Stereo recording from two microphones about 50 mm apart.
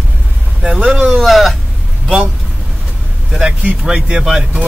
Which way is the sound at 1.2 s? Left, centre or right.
Centre.